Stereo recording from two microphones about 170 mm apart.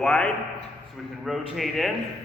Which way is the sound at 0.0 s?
5° left (ahead or behind).